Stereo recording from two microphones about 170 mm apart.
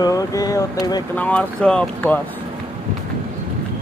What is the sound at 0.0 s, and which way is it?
Speech, 20° left (ahead or behind).